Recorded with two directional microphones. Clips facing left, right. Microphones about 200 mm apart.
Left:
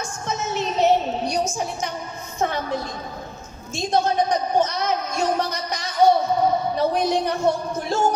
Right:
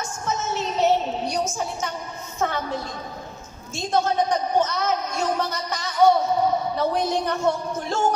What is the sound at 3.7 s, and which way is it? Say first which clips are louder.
Speech: left 1 dB; 15° left (ahead or behind).